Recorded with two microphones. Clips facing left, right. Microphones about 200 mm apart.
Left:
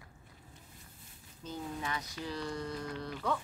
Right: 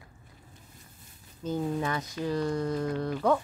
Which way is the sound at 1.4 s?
50° right (ahead or behind).